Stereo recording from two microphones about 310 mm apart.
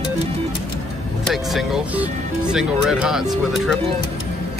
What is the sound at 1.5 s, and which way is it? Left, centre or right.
Speech, centre.